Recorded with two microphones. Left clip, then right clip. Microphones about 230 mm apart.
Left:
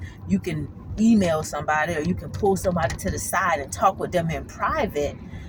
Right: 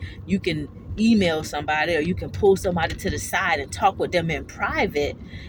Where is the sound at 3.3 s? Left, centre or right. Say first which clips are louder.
Even; left.